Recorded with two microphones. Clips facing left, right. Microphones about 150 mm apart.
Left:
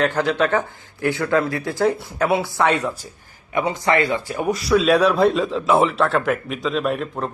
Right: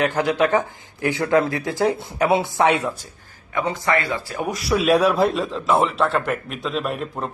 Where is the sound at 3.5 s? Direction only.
15° left (ahead or behind).